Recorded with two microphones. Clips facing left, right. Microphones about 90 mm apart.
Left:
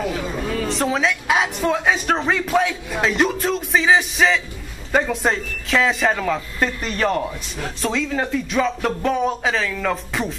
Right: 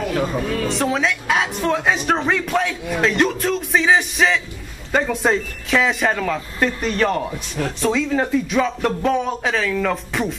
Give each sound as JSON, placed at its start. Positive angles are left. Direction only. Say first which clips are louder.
{"t": 0.5, "sound": "speech", "louder": "right 1 dB", "side_deg": 0}